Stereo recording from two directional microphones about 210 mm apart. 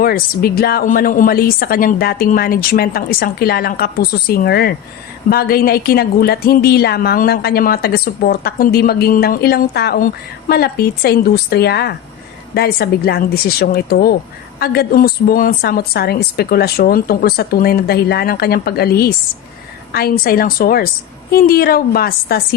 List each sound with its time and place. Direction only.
0.0 s a woman's voice: 45° left (ahead or behind)